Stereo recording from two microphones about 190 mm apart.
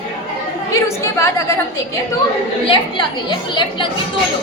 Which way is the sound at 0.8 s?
15° left (ahead or behind).